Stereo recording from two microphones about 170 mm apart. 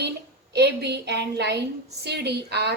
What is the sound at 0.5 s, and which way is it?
A woman's voice, 80° right.